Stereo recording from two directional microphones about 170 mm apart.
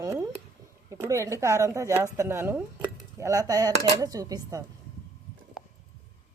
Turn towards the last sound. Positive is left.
turn(degrees=0)  # may be behind; listen again after turning